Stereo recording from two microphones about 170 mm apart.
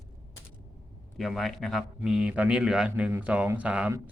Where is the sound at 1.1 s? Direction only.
Centre (ahead or behind).